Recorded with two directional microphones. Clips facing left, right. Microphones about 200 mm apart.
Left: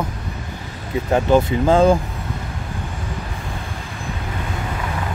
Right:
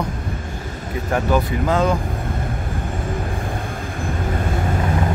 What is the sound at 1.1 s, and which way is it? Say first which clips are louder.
Speech: left 4 dB; 25° left (ahead or behind).